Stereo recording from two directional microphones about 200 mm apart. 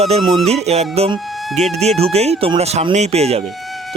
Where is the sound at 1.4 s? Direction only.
Centre (ahead or behind).